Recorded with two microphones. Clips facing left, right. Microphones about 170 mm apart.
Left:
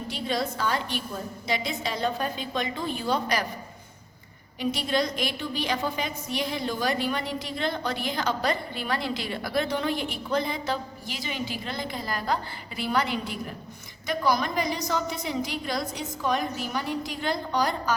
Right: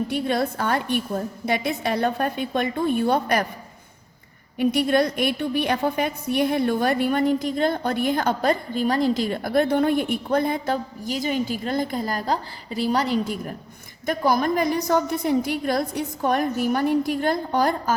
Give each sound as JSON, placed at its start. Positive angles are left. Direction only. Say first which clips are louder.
{"t": 0.1, "sound": "a woman's voice", "louder": "right 6 dB", "side_deg": -55}
{"t": 4.6, "sound": "a woman's voice", "louder": "right 7 dB", "side_deg": -55}